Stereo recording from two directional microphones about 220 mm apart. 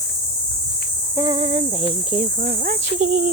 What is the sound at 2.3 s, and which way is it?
Speech, 40° right (ahead or behind).